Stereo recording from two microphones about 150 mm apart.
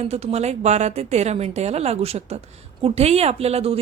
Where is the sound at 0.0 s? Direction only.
45° right (ahead or behind).